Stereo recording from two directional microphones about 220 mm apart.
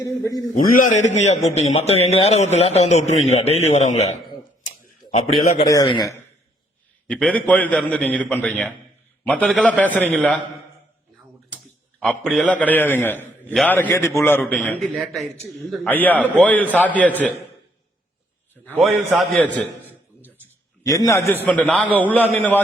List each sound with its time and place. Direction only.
0.0 s a man's voice: 15° left (ahead or behind)
0.5 s a man's voice: 35° left (ahead or behind)
5.6 s a man's voice: 20° left (ahead or behind)
7.1 s a man's voice: 5° left (ahead or behind)
11.5 s a man's voice: 5° left (ahead or behind)
18.6 s a man's voice: 5° left (ahead or behind)
20.8 s a man's voice: 15° left (ahead or behind); by 22.1 s 5° right (ahead or behind)
22.4 s a man's voice: 10° left (ahead or behind)